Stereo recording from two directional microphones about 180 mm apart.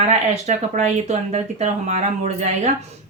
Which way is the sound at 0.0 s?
40° right (ahead or behind).